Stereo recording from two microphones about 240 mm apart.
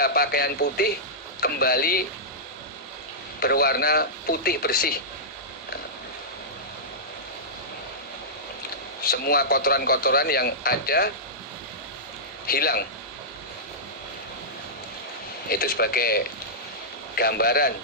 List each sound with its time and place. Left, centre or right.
0.0 s a man's voice: left
3.4 s a man's voice: left
9.0 s a man's voice: left
12.5 s a man's voice: left
15.4 s a man's voice: left